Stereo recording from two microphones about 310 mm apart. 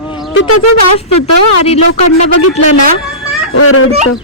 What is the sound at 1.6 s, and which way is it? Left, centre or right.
Speech, centre.